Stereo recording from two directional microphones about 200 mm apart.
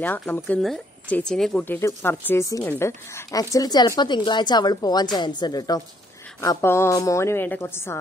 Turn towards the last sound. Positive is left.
turn(degrees=10)  # may be behind; listen again after turning